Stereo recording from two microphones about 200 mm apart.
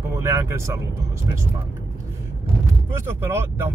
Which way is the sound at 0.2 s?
15° right (ahead or behind).